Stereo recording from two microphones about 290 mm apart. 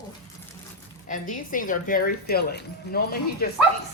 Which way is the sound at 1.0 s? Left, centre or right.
Left.